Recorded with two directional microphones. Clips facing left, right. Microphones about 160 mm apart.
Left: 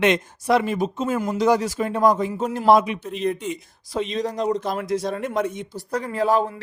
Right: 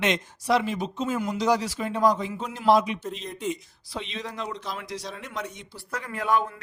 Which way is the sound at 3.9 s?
45° left (ahead or behind).